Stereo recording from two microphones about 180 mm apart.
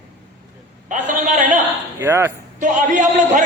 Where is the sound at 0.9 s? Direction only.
45° right (ahead or behind).